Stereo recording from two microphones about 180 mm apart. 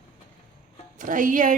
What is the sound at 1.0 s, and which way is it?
Speech, 45° right (ahead or behind).